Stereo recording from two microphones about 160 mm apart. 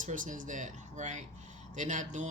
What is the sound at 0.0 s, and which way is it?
Speech, 55° right (ahead or behind).